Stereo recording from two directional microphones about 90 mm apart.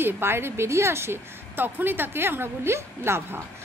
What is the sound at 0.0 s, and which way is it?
Speech, 25° right (ahead or behind).